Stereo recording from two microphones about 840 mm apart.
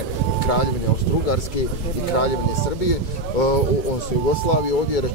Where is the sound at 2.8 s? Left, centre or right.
Left.